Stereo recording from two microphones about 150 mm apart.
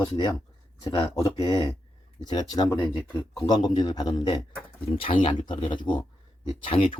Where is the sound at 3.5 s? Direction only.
30° left (ahead or behind).